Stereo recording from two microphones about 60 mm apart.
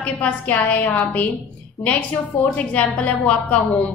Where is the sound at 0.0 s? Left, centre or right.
Left.